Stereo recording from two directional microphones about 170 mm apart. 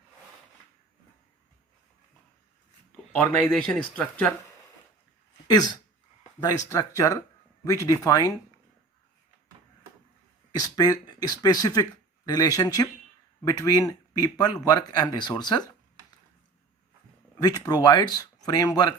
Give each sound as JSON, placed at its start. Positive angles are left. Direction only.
{"t": 3.4, "sound": "speech", "side_deg": 5}
{"t": 5.5, "sound": "speech", "side_deg": 25}
{"t": 10.6, "sound": "speech", "side_deg": 20}
{"t": 17.3, "sound": "speech", "side_deg": 20}